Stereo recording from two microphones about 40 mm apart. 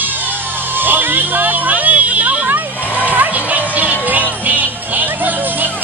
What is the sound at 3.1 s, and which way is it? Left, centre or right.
Music, right.